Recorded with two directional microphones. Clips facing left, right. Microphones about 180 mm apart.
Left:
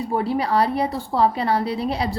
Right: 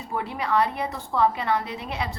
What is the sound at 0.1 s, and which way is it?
A woman's voice, 35° left (ahead or behind).